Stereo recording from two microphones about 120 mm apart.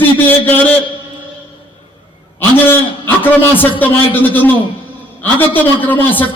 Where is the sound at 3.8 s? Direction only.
15° left (ahead or behind).